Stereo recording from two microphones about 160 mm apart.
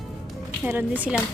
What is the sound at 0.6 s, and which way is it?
Speech, 10° right (ahead or behind).